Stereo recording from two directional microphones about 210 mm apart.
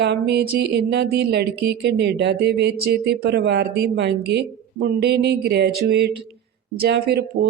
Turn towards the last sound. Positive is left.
turn(degrees=-50)  # may be behind; listen again after turning